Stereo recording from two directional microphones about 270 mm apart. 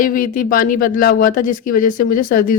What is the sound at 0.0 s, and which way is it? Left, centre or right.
A woman's voice, left.